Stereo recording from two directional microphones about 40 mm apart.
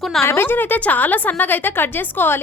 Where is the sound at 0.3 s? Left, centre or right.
Left.